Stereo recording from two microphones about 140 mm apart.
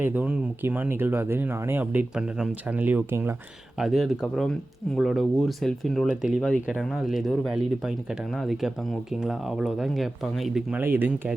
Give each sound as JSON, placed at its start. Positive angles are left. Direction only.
{"t": 0.0, "sound": "speech", "side_deg": -10}
{"t": 3.8, "sound": "speech", "side_deg": 0}
{"t": 10.8, "sound": "speech", "side_deg": -15}